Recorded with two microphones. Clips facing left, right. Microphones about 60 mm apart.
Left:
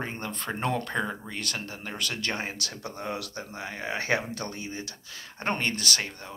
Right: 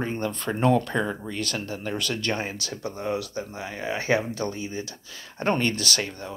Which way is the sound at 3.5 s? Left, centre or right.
Left.